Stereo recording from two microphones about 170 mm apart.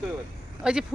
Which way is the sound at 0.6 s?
5° right (ahead or behind).